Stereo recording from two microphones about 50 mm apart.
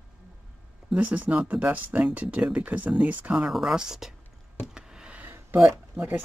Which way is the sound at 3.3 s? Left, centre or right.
Centre.